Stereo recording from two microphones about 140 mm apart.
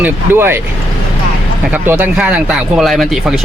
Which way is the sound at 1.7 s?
15° right (ahead or behind).